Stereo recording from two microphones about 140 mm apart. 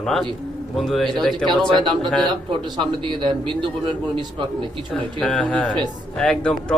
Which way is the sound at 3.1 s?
35° right (ahead or behind).